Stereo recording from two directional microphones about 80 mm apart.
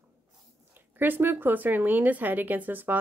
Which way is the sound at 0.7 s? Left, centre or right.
Right.